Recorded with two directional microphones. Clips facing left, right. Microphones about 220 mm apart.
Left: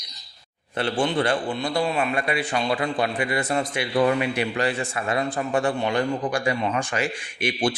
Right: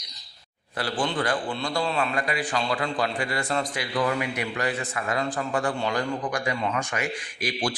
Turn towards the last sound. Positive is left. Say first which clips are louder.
# left 4 dB
turn(degrees=25)  # may be behind; listen again after turning